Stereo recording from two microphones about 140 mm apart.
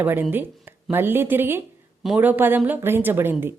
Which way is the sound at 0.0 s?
15° right (ahead or behind).